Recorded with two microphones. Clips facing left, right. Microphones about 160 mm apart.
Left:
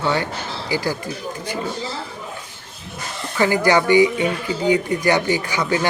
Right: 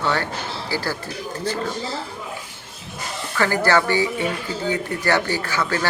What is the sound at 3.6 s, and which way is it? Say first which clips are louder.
Speech: left 6 dB; 15° left (ahead or behind).